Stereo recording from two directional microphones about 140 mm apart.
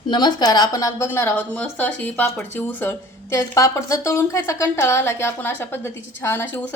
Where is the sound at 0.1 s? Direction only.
30° left (ahead or behind).